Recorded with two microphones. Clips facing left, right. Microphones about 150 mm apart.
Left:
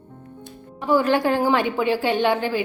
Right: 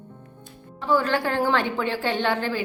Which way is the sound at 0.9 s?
15° left (ahead or behind).